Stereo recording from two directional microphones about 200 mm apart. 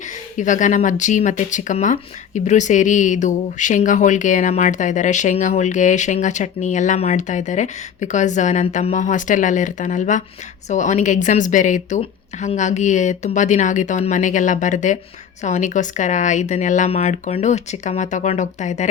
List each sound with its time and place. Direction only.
0.3 s speech: 40° left (ahead or behind)